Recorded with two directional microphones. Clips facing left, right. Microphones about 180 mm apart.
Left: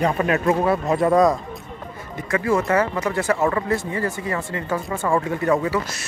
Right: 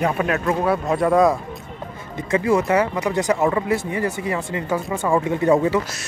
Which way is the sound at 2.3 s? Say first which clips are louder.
Right 2 dB; 15° right (ahead or behind).